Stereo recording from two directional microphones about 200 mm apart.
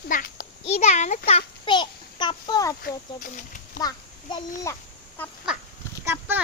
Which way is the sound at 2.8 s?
45° left (ahead or behind).